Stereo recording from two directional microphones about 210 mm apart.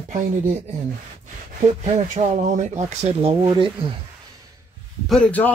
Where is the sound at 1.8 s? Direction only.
30° right (ahead or behind).